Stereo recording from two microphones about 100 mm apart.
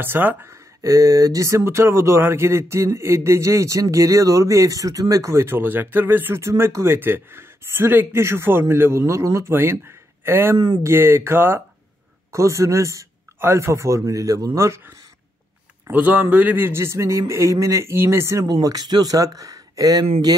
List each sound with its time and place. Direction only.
0.0 s speech: 20° right (ahead or behind)
0.8 s speech: 35° right (ahead or behind)
15.9 s speech: 15° right (ahead or behind)
18.5 s speech: 40° right (ahead or behind)